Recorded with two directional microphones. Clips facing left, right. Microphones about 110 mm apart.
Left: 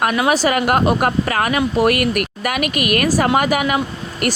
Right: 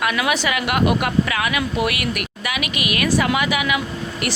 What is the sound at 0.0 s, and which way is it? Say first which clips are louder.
Speech: left 5 dB; 40° left (ahead or behind).